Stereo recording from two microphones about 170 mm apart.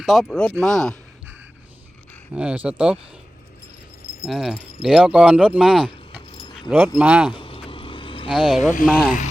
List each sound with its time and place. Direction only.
0.0 s speech: centre (ahead or behind)
2.3 s speech: 5° right (ahead or behind)
4.3 s speech: centre (ahead or behind)
6.3 s keys jangling: 30° left (ahead or behind)
6.7 s speech: 10° right (ahead or behind)
7.3 s vehicle: 30° left (ahead or behind)
8.3 s speech: 5° right (ahead or behind)